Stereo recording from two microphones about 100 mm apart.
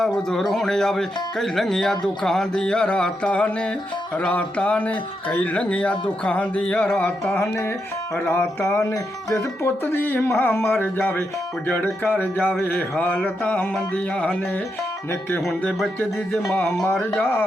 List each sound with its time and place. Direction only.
0.0 s speech: 5° left (ahead or behind)
7.4 s speech: 20° left (ahead or behind)
15.4 s speech: 5° left (ahead or behind)